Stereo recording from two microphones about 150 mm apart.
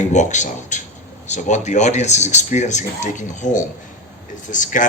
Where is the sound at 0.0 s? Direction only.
55° left (ahead or behind).